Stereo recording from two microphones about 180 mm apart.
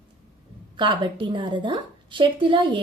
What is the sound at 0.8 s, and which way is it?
A woman's voice, 25° right (ahead or behind).